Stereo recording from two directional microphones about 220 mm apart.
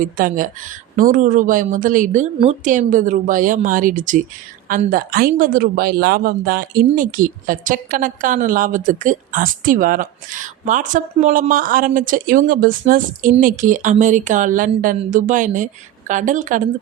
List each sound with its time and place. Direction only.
0.0 s speech: 40° right (ahead or behind)